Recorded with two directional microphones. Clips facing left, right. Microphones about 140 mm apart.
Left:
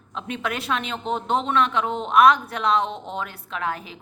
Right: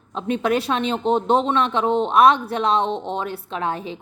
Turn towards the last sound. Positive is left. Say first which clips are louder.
# right 4 dB
turn(degrees=-30)  # may be behind; listen again after turning